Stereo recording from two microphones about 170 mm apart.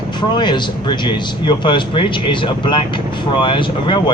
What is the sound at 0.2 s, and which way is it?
A man's voice, 25° left (ahead or behind).